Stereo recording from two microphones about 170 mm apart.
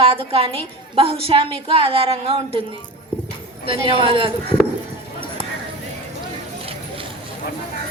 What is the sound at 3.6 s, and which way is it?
Speech, 30° right (ahead or behind).